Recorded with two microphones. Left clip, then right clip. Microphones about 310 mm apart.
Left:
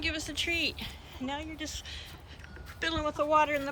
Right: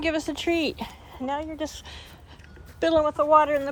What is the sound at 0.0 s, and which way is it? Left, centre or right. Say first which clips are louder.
Speech: right 6 dB; centre.